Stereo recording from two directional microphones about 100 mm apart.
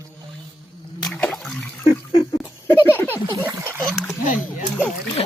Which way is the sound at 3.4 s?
25° right (ahead or behind).